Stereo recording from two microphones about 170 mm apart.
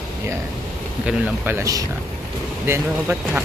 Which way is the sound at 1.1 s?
15° right (ahead or behind).